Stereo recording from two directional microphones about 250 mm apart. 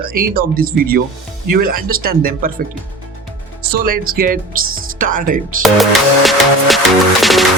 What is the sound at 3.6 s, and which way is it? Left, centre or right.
Speech, right.